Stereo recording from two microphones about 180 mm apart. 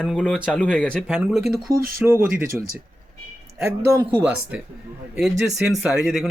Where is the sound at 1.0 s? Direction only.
5° right (ahead or behind).